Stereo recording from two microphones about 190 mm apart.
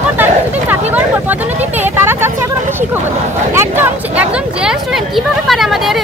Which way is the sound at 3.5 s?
10° right (ahead or behind).